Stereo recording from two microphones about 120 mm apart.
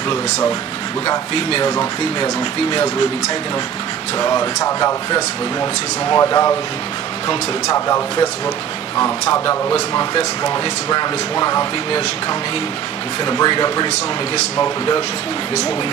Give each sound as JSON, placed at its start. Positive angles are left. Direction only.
{"t": 1.0, "sound": "speech", "side_deg": 45}
{"t": 1.6, "sound": "speech", "side_deg": 35}
{"t": 4.2, "sound": "speech", "side_deg": 35}
{"t": 9.3, "sound": "speech", "side_deg": 25}
{"t": 10.1, "sound": "speech", "side_deg": 40}
{"t": 13.2, "sound": "speech", "side_deg": 35}